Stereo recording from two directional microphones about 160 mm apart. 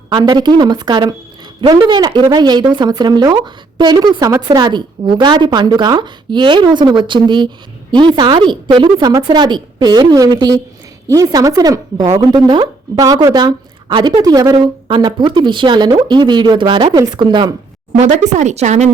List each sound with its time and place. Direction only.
0.1 s speech: 30° right (ahead or behind)
17.9 s speech: 50° right (ahead or behind)